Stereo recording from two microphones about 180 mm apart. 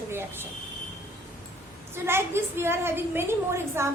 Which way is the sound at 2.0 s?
15° right (ahead or behind).